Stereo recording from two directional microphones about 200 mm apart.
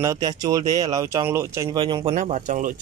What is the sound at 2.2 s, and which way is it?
Speech, 40° right (ahead or behind).